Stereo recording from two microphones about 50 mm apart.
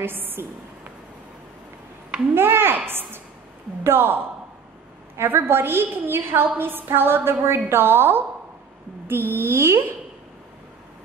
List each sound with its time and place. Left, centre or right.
0.0 s a woman's voice: right
2.3 s a woman's voice: right